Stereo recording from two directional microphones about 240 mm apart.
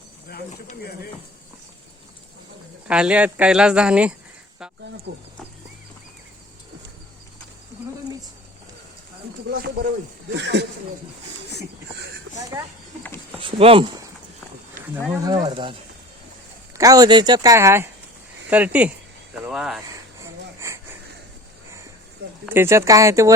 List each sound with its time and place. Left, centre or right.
0.3 s speech: left
2.8 s speech: centre
5.1 s speech: right
9.6 s speech: right
13.4 s speech: right
16.7 s speech: centre
20.2 s wheeze: centre
22.4 s speech: centre